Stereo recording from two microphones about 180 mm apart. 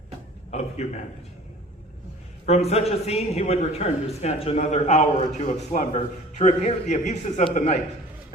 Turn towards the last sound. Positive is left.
turn(degrees=40)  # may be behind; listen again after turning